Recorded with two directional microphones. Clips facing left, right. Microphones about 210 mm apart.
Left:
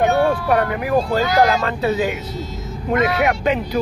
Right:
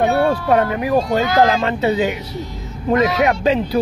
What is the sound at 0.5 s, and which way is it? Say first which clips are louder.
Speech: right 2 dB; 25° right (ahead or behind).